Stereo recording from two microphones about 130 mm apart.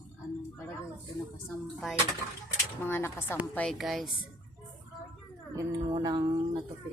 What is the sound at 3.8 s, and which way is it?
Speech, centre (ahead or behind).